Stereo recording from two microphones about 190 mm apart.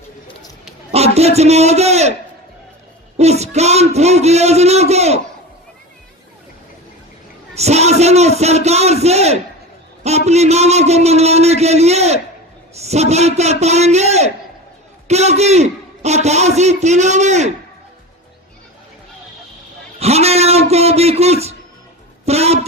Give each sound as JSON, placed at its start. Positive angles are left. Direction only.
{"t": 0.9, "sound": "a man's voice", "side_deg": -35}
{"t": 3.2, "sound": "a man's voice", "side_deg": -35}
{"t": 7.5, "sound": "a man's voice", "side_deg": -35}
{"t": 20.0, "sound": "a man's voice", "side_deg": -35}